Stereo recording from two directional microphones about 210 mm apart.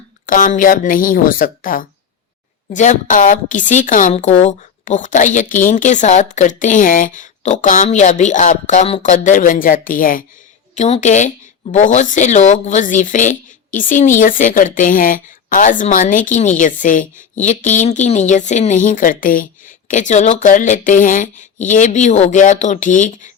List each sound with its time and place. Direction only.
0.3 s speech: 40° left (ahead or behind)